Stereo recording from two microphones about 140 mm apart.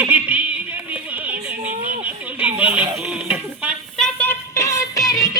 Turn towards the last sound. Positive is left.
turn(degrees=25)  # may be behind; listen again after turning